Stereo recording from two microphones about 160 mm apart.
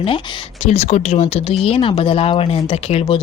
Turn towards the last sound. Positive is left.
turn(degrees=35)  # may be behind; listen again after turning